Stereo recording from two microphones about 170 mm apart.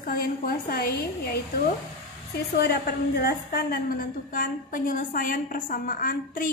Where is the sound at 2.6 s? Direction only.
70° left (ahead or behind).